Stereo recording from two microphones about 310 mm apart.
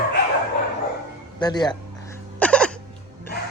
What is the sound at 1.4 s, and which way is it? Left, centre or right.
Speech, centre.